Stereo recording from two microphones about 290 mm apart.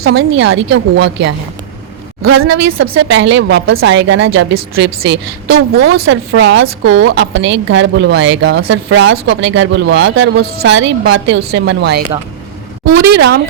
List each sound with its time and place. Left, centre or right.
0.0 s a woman's voice: right
2.5 s speech: right
2.7 s a woman's voice: right